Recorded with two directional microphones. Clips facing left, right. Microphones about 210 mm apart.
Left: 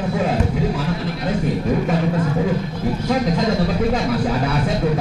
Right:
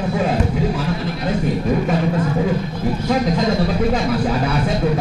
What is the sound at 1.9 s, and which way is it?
Speech, 20° right (ahead or behind).